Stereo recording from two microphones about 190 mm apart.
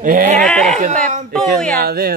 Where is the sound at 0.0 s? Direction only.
45° right (ahead or behind).